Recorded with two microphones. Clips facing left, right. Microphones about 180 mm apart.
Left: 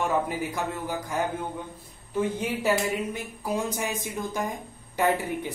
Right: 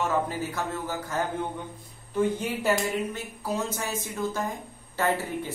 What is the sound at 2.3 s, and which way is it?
Speech, 10° left (ahead or behind).